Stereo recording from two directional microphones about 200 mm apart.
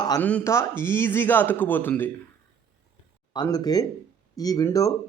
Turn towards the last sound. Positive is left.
turn(degrees=15)  # may be behind; listen again after turning